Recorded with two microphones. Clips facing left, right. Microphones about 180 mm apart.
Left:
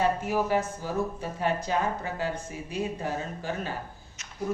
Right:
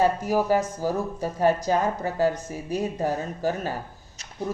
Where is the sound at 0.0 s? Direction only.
40° right (ahead or behind).